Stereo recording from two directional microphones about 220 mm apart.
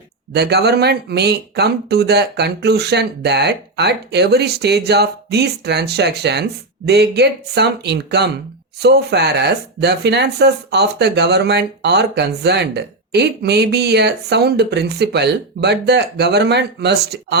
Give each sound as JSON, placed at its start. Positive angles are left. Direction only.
{"t": 0.3, "sound": "speech", "side_deg": -50}